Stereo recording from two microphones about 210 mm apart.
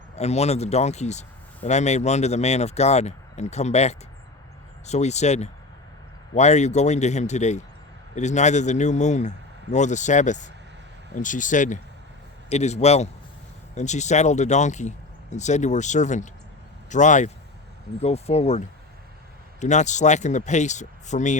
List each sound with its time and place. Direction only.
0.2 s speech: 30° left (ahead or behind)